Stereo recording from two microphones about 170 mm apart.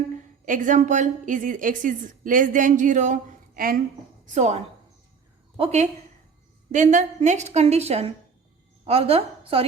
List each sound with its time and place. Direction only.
0.4 s a woman's voice: 50° right (ahead or behind)
4.4 s a woman's voice: 40° right (ahead or behind)
6.7 s a woman's voice: 45° right (ahead or behind); by 9.6 s 30° right (ahead or behind)